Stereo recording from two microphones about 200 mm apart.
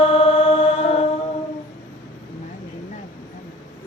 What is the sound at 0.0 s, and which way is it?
Mantra, 30° left (ahead or behind).